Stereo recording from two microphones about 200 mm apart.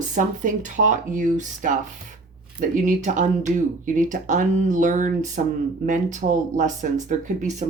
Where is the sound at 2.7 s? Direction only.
35° right (ahead or behind).